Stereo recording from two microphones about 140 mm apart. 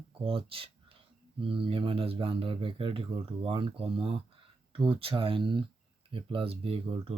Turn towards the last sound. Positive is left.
turn(degrees=-40)  # may be behind; listen again after turning